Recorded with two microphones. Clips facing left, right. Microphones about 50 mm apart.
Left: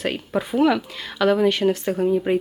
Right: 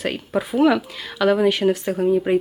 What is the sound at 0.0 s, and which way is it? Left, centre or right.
Speech, centre.